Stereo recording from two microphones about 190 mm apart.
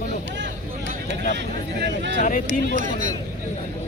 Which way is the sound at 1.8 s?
65° right (ahead or behind).